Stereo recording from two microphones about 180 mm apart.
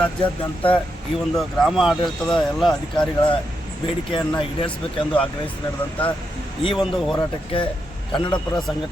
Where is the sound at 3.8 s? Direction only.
30° left (ahead or behind).